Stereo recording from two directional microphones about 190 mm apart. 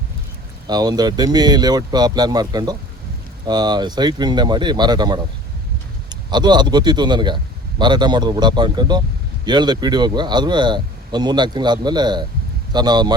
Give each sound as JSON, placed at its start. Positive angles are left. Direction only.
{"t": 0.7, "sound": "a man's voice", "side_deg": -20}